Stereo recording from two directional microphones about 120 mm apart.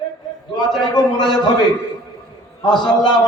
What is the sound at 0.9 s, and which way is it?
Speech, 35° left (ahead or behind).